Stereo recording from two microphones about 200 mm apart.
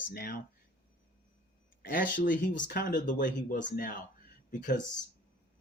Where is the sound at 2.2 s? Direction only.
45° left (ahead or behind).